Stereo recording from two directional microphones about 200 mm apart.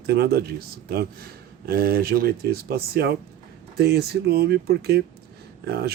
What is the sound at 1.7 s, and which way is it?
Speech, 50° right (ahead or behind).